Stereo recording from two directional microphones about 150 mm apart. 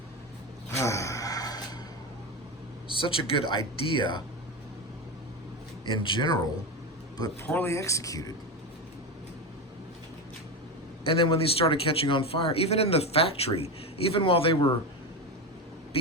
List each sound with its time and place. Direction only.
0.7 s a sound: 20° left (ahead or behind)
2.9 s a man's voice: 35° left (ahead or behind)
5.8 s a man's voice: 35° left (ahead or behind)
7.4 s speech: 15° left (ahead or behind)
11.0 s a man's voice: 40° left (ahead or behind)